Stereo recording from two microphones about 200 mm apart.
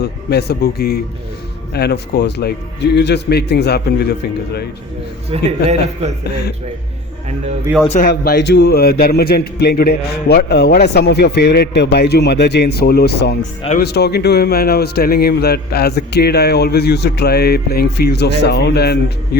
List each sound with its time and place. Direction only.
0.0 s a man's voice: 55° left (ahead or behind)
5.3 s speech: 30° right (ahead or behind)
6.2 s a man's voice: 55° left (ahead or behind)
7.9 s speech: 40° left (ahead or behind)
8.1 s a man's voice: 50° left (ahead or behind)